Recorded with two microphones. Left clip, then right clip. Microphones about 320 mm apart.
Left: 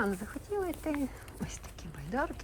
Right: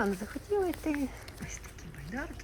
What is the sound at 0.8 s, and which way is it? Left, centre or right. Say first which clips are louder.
Speech: right 1 dB; centre.